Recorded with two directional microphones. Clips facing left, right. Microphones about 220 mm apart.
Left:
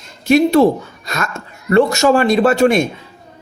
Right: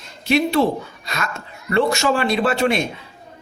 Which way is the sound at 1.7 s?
45° left (ahead or behind).